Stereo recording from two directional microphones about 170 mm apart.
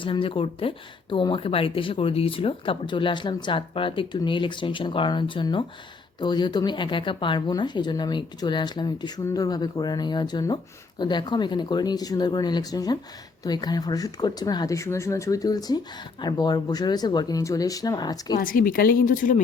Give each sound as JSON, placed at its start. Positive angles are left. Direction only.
{"t": 0.0, "sound": "speech", "side_deg": 30}
{"t": 18.3, "sound": "speech", "side_deg": 55}